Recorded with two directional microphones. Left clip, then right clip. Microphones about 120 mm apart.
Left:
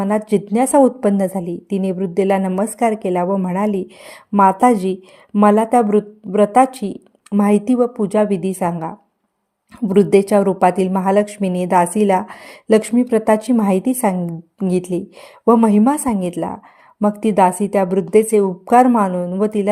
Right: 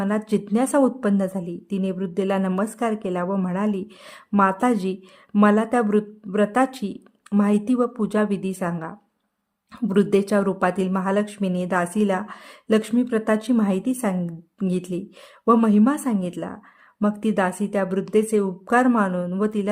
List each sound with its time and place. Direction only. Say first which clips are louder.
0.0 s a woman's voice: left 7 dB; 20° left (ahead or behind)
9.9 s a woman's voice: left 7 dB; 20° left (ahead or behind)